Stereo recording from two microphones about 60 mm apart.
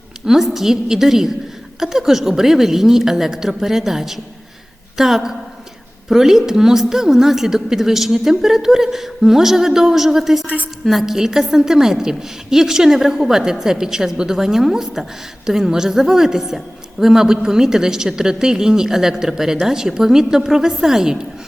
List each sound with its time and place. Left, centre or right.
0.3 s a woman's voice: centre
10.4 s a woman's voice: right
10.8 s a woman's voice: centre